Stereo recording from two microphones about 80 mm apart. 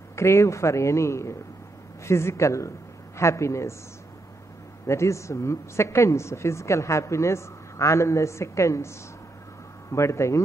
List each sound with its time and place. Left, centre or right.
0.1 s a woman's voice: left
4.8 s a woman's voice: left